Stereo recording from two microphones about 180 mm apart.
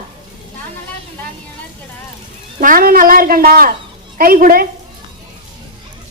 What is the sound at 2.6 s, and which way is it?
A woman's voice, 50° right (ahead or behind).